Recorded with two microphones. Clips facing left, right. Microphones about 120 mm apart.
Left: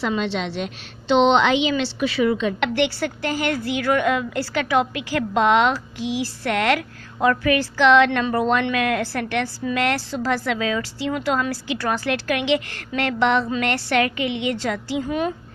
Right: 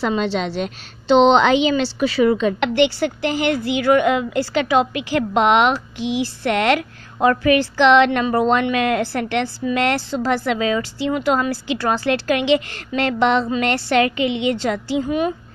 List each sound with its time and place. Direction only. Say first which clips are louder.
0.0 s a woman's voice: right 3 dB; 40° right (ahead or behind)
2.7 s a woman's voice: right 5 dB; 20° right (ahead or behind)
15.0 s a woman's voice: right 3 dB; 10° right (ahead or behind)